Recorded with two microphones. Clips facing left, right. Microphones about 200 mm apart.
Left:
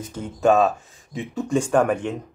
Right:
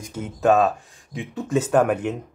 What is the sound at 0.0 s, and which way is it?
Speech, 5° right (ahead or behind).